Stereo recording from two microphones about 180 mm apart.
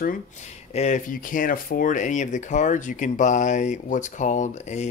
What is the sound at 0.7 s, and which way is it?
Speech, 40° left (ahead or behind).